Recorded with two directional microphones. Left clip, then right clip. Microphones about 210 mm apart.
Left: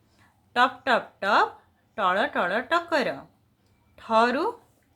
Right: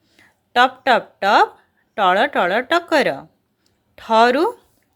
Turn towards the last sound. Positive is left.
turn(degrees=-35)  # may be behind; listen again after turning